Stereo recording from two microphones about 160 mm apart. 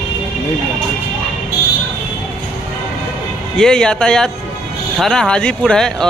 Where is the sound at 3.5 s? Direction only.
5° left (ahead or behind).